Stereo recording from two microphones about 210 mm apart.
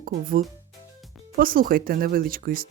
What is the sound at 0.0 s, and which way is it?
Speech, 40° right (ahead or behind).